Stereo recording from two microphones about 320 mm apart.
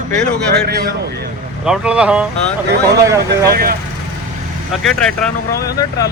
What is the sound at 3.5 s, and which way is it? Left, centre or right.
Speech, right.